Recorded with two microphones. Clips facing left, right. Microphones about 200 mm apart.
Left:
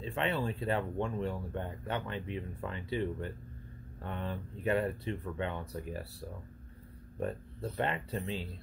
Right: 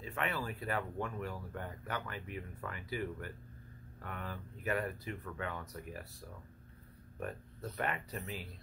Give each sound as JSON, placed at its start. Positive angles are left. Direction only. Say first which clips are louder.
{"t": 0.0, "sound": "speech", "louder": "left 5 dB", "side_deg": 25}
{"t": 7.2, "sound": "speech", "louder": "left 6 dB", "side_deg": 30}